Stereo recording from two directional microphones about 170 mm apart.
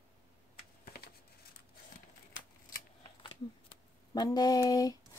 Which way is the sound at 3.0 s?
30° left (ahead or behind).